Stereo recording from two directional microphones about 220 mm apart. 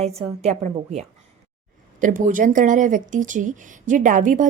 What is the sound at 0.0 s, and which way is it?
A woman's voice, 30° right (ahead or behind).